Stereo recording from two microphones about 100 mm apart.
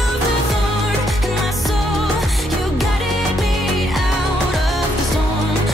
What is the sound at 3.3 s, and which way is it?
Music, centre (ahead or behind).